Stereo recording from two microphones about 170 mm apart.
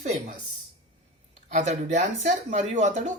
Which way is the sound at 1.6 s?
45° right (ahead or behind).